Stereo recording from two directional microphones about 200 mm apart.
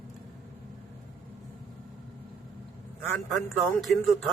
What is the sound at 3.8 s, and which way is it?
Speech, centre (ahead or behind).